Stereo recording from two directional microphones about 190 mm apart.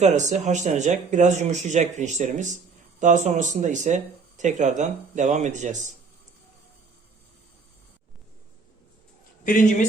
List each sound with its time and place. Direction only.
0.0 s speech: 40° right (ahead or behind)
9.4 s speech: 40° left (ahead or behind)